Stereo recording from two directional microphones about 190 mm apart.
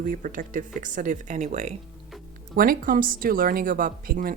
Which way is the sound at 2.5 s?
50° right (ahead or behind).